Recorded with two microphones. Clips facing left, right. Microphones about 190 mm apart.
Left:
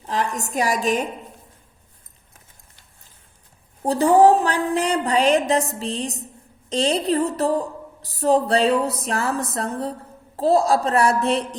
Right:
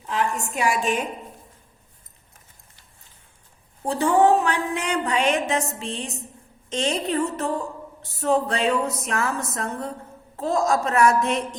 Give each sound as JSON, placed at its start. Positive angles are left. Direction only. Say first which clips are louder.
{"t": 0.0, "sound": "a woman's voice", "louder": "left 1 dB", "side_deg": 35}
{"t": 3.8, "sound": "a woman's voice", "louder": "left 4 dB", "side_deg": 35}